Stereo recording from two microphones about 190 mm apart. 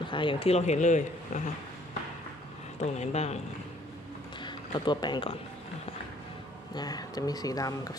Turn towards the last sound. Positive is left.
turn(degrees=20)  # may be behind; listen again after turning